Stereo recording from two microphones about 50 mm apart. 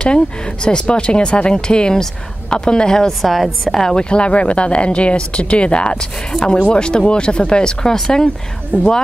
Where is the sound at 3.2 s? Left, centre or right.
Centre.